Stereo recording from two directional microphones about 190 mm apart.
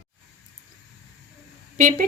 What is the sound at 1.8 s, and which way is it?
Speech, 45° right (ahead or behind).